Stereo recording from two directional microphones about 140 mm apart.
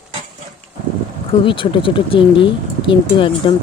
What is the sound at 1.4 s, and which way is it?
Speech, 35° left (ahead or behind).